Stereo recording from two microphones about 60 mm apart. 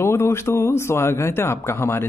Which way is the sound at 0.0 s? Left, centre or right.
Left.